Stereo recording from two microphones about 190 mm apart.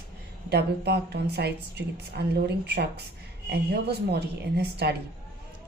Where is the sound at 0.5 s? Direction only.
60° right (ahead or behind).